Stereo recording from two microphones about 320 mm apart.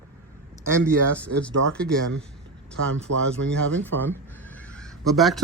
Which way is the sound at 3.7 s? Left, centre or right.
Centre.